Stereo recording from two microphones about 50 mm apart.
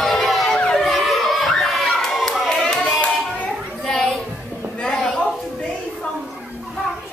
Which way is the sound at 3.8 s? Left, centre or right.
Centre.